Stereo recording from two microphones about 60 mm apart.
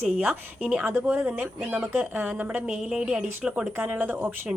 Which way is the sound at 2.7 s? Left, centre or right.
Centre.